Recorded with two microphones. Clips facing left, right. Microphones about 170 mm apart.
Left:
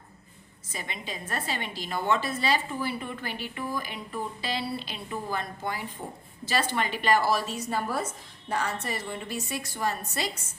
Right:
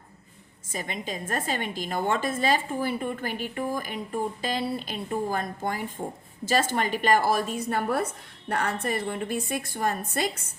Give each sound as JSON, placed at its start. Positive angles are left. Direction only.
{"t": 0.7, "sound": "a woman's voice", "side_deg": -45}